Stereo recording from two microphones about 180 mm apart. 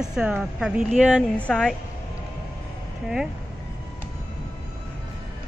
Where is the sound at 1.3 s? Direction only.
5° left (ahead or behind).